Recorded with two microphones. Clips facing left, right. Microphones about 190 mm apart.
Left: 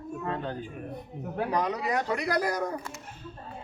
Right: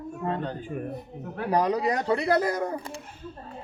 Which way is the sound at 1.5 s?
35° right (ahead or behind).